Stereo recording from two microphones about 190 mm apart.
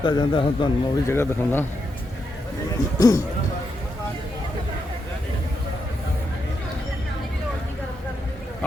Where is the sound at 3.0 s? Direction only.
20° left (ahead or behind).